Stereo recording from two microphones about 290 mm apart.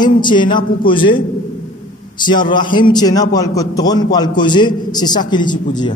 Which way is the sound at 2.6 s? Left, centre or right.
Centre.